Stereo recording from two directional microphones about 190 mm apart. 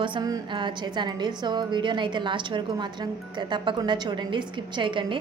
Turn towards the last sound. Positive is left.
turn(degrees=-25)  # may be behind; listen again after turning